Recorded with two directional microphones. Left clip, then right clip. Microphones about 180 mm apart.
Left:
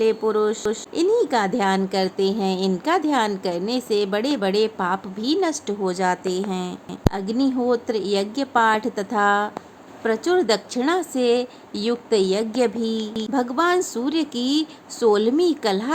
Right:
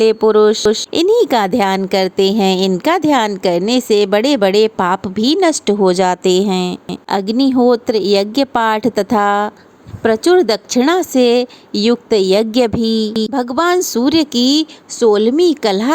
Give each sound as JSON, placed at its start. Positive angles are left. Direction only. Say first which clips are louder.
{"t": 0.0, "sound": "speech", "louder": "right 10 dB", "side_deg": -40}